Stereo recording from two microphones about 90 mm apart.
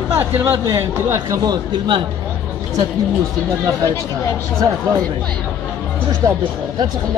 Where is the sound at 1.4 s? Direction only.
50° right (ahead or behind).